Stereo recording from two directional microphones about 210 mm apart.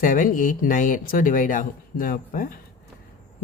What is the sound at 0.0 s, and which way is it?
Speech, 40° left (ahead or behind).